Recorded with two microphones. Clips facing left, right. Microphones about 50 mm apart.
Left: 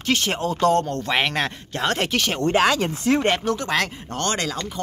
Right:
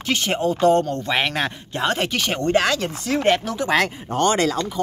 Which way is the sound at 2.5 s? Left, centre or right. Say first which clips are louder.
Even; centre.